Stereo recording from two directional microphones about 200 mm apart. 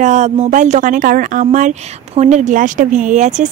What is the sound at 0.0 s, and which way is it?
Speech, 35° right (ahead or behind).